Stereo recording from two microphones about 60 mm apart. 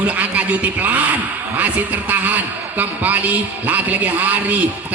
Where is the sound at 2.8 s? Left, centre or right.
Right.